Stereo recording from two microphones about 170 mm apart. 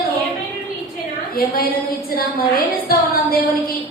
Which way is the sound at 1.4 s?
60° left (ahead or behind).